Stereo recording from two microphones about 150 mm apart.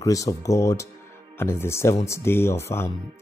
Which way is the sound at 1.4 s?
15° left (ahead or behind).